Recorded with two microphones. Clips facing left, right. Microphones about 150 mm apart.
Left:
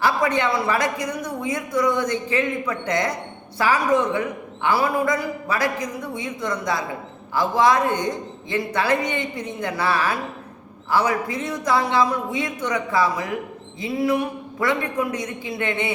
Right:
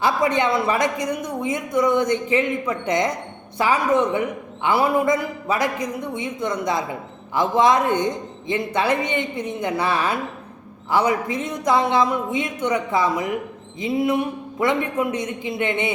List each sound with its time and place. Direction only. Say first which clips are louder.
0.0 s speech: right 1 dB; 20° right (ahead or behind)